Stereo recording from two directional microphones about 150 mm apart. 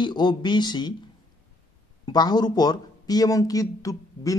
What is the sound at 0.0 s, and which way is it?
Speech, 30° left (ahead or behind).